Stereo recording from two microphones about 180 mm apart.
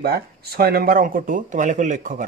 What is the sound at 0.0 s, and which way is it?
Speech, 60° right (ahead or behind).